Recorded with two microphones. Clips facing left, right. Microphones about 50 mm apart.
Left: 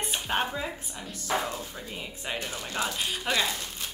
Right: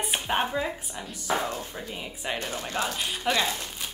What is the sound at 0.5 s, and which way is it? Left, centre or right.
Speech, right.